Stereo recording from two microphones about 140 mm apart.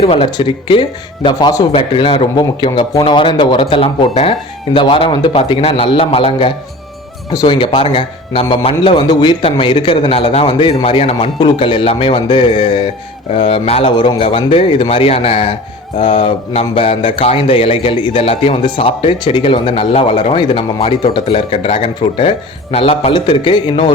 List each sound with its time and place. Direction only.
0.0 s a man's voice: 45° left (ahead or behind)
1.7 s a man's voice: 40° left (ahead or behind)